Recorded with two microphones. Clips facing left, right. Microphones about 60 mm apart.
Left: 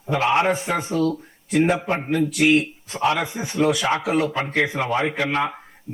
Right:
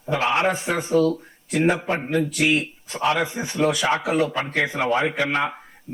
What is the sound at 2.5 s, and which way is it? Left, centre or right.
A man's voice, centre.